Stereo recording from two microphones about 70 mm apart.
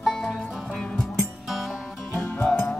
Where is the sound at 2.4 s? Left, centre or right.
Centre.